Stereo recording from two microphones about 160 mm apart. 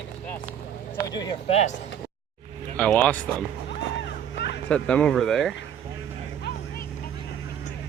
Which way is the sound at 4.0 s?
90° left.